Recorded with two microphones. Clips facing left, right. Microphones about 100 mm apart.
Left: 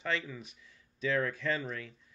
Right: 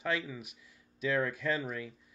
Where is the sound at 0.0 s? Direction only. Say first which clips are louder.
Right 1 dB; 10° right (ahead or behind).